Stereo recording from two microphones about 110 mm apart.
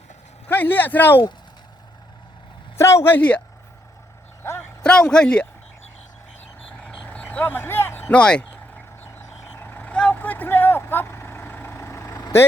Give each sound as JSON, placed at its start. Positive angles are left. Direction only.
{"t": 0.4, "sound": "speech", "side_deg": 15}
{"t": 2.7, "sound": "speech", "side_deg": 25}
{"t": 4.8, "sound": "a man's voice", "side_deg": 5}
{"t": 6.7, "sound": "vehicle", "side_deg": 10}
{"t": 8.1, "sound": "speech", "side_deg": 10}
{"t": 9.6, "sound": "vehicle", "side_deg": 15}